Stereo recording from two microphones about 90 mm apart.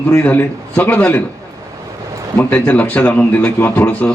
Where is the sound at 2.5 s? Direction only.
20° left (ahead or behind).